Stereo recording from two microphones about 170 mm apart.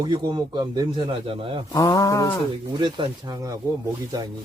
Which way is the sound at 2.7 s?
25° right (ahead or behind).